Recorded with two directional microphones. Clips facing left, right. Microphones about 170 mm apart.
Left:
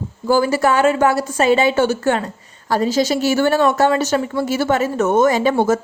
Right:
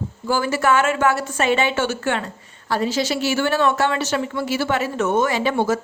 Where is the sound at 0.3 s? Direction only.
35° left (ahead or behind).